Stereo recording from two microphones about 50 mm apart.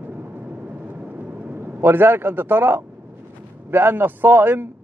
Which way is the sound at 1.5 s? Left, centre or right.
Right.